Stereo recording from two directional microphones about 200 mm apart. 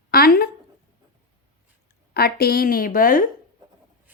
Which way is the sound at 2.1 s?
50° left (ahead or behind).